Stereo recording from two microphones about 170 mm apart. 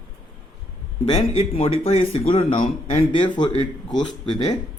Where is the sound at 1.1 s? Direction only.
35° left (ahead or behind).